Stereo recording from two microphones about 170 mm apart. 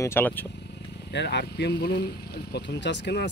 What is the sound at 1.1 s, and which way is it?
Speech, 85° left.